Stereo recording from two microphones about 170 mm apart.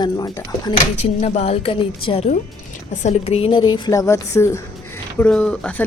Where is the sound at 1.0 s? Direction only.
40° left (ahead or behind).